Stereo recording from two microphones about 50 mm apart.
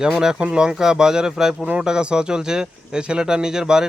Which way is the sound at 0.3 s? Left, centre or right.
Right.